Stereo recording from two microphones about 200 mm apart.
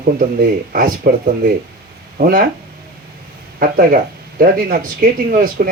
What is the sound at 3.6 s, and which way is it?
Speech, 45° right (ahead or behind).